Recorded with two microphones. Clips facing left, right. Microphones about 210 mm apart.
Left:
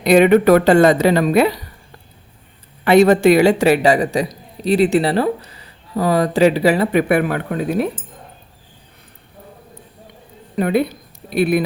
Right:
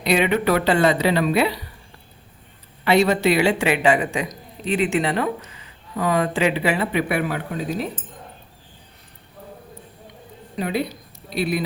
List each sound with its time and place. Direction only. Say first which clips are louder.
0.0 s speech: left 8 dB; 45° left (ahead or behind)
2.8 s speech: left 7 dB; 50° left (ahead or behind)
10.6 s speech: left 7 dB; 55° left (ahead or behind)